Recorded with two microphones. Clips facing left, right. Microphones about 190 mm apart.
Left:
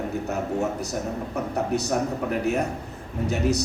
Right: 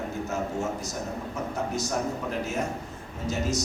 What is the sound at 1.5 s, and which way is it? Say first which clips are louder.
Speech: left 6 dB; 65° left (ahead or behind).